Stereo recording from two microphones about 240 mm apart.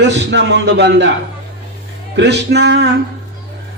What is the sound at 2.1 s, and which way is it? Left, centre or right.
Speech, right.